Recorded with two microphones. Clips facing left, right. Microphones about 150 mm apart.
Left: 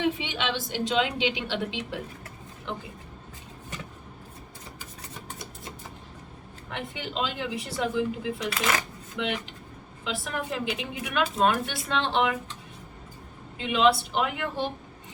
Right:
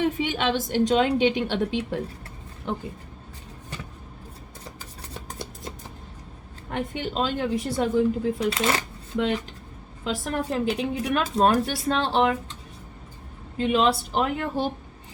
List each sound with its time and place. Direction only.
0.0 s a woman's voice: 45° right (ahead or behind)
6.7 s a woman's voice: 45° right (ahead or behind)
13.6 s speech: 40° right (ahead or behind)